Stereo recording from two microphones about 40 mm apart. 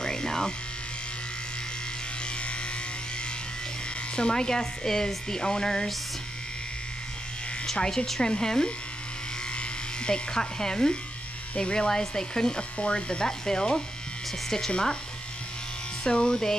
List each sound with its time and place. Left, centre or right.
0.0 s electric shaver: centre
4.1 s speech: left
7.7 s speech: centre
16.0 s speech: left